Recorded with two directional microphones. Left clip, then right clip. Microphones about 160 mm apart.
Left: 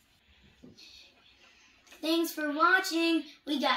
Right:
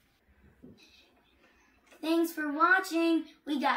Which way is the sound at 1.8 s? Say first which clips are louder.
Even; centre (ahead or behind).